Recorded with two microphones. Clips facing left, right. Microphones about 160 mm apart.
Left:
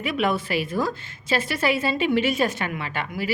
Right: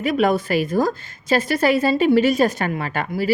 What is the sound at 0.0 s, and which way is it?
A woman's voice, 40° right (ahead or behind).